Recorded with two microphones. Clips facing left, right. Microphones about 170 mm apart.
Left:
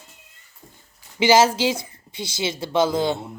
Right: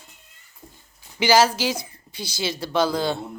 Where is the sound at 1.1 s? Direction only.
25° left (ahead or behind).